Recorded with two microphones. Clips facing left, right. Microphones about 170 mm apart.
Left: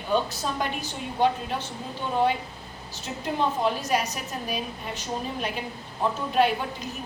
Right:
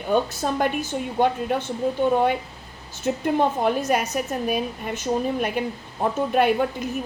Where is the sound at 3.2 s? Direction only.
55° right (ahead or behind).